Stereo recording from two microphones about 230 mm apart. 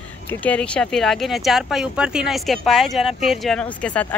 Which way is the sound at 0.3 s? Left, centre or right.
Centre.